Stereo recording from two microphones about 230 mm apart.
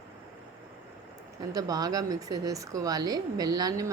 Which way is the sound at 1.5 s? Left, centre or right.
Centre.